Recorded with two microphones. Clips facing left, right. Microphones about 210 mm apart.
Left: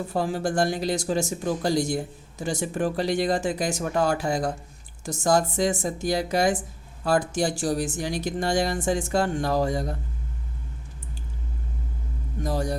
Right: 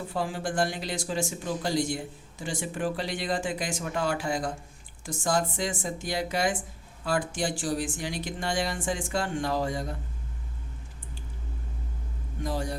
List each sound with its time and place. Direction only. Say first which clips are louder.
0.1 s speech: left 5 dB; 40° left (ahead or behind)
12.4 s speech: left 4 dB; 40° left (ahead or behind)